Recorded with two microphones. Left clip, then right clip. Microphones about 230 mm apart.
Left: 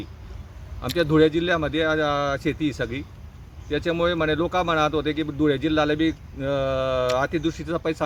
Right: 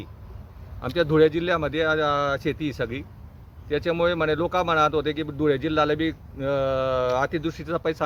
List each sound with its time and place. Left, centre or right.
0.8 s speech: centre